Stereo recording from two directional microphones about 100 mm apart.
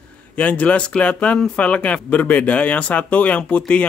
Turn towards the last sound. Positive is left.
turn(degrees=15)  # may be behind; listen again after turning